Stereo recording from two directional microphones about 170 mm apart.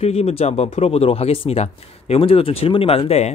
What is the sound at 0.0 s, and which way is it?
Speech, 35° left (ahead or behind).